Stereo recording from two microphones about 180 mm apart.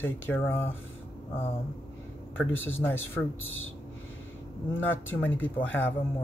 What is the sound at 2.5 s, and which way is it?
Speech, 90° left.